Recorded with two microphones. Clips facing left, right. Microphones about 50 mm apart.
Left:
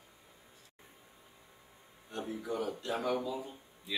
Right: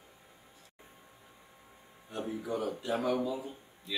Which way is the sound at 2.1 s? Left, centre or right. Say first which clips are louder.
Right 2 dB; centre.